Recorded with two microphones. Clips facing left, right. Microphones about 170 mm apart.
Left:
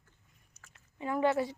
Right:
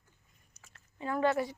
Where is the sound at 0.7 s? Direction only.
15° left (ahead or behind).